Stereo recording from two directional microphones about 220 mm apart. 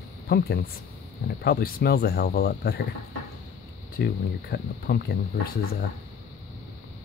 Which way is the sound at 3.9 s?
45° left (ahead or behind).